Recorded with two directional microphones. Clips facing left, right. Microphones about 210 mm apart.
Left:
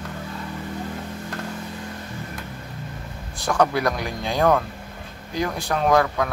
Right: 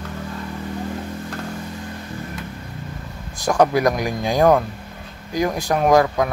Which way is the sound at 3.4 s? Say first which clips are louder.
Right 4 dB; 15° right (ahead or behind).